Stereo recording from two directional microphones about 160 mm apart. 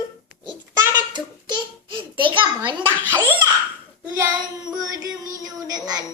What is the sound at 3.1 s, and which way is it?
Laughter, 15° right (ahead or behind).